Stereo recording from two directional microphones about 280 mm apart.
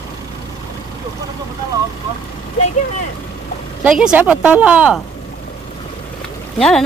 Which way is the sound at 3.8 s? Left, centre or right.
Centre.